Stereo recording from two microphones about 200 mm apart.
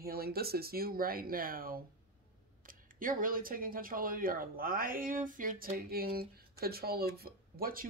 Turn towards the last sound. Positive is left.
turn(degrees=-50)  # may be behind; listen again after turning